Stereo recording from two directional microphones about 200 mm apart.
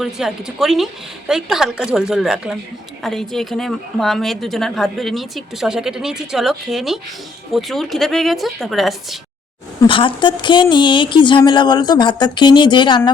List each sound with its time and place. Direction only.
0.0 s a woman's voice: centre (ahead or behind)
9.8 s a woman's voice: 25° left (ahead or behind)